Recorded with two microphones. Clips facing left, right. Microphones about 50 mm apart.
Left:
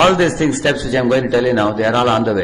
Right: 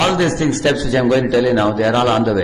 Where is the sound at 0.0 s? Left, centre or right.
Left.